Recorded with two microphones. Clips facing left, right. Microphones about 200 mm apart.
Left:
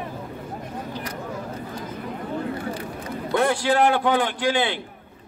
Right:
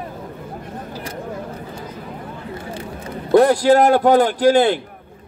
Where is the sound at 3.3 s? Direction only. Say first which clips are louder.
Right 9 dB; 35° right (ahead or behind).